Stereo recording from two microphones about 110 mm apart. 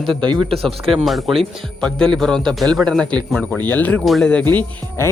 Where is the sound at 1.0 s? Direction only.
Centre (ahead or behind).